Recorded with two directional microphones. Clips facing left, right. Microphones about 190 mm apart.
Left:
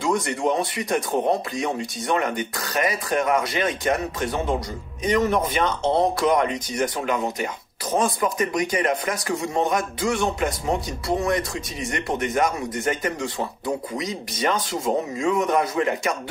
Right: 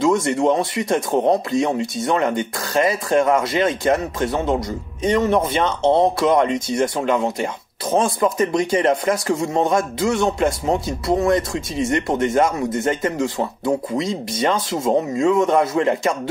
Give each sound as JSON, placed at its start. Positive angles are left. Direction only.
{"t": 0.1, "sound": "speech", "side_deg": -25}